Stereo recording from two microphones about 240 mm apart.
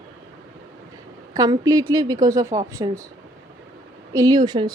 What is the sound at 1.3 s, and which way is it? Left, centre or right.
A woman's voice, centre.